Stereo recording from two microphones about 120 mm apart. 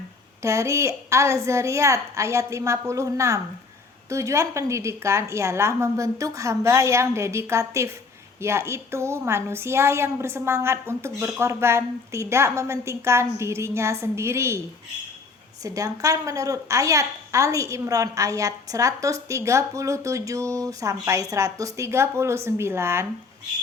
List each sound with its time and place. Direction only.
0.4 s a woman's voice: 25° right (ahead or behind)
15.6 s a woman's voice: 30° right (ahead or behind)